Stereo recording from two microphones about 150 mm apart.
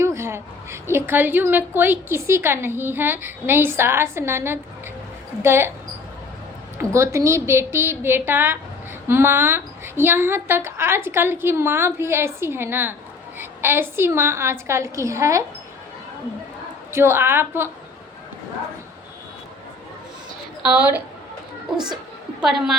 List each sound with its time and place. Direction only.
0.0 s a woman's voice: 20° right (ahead or behind)
6.7 s a woman's voice: 15° right (ahead or behind)
16.9 s a woman's voice: 15° right (ahead or behind)
20.7 s a woman's voice: 10° right (ahead or behind)
22.4 s a woman's voice: centre (ahead or behind)